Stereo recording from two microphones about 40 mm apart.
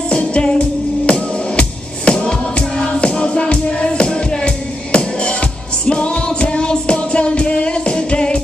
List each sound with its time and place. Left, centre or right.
0.1 s music: left